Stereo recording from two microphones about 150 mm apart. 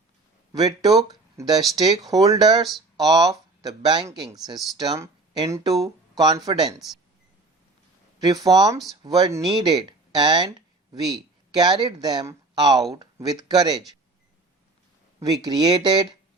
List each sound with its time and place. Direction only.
0.5 s speech: 25° right (ahead or behind)
8.4 s speech: 25° right (ahead or behind)
15.2 s speech: 25° right (ahead or behind)